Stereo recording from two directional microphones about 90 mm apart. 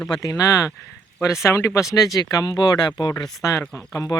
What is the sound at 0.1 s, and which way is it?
Speech, 45° left (ahead or behind).